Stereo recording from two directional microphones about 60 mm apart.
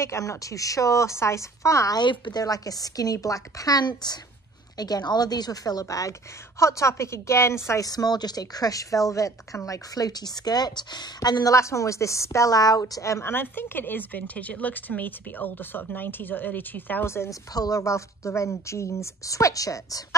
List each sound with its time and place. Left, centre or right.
0.0 s speech: left
6.6 s a woman's voice: left
7.8 s speech: left
11.1 s speech: left
12.4 s speech: left
13.2 s speech: left
17.0 s a woman's voice: left
17.3 s speech: left